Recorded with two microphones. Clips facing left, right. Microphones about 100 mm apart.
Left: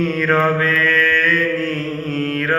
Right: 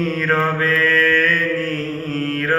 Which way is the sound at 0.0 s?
35° right (ahead or behind).